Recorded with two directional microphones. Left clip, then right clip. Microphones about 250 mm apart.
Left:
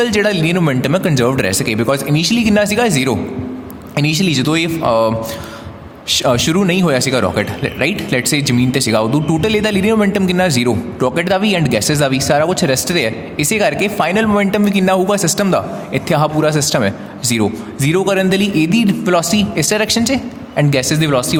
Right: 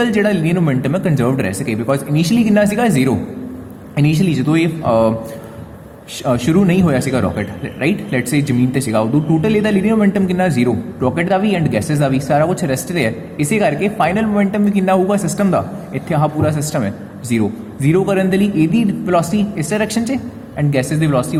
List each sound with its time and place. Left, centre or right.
0.0 s speech: left